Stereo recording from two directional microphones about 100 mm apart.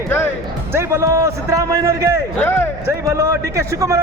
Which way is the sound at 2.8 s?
25° right (ahead or behind).